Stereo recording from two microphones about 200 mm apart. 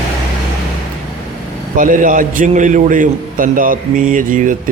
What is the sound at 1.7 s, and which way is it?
A man's voice, 40° right (ahead or behind).